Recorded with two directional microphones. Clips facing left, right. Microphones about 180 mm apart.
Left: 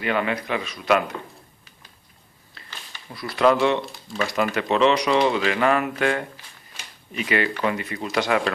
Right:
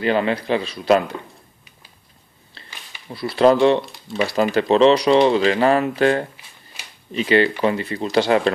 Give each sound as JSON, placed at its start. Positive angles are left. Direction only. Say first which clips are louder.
{"t": 0.0, "sound": "speech", "louder": "right 5 dB", "side_deg": -30}
{"t": 3.1, "sound": "speech", "louder": "right 4 dB", "side_deg": -30}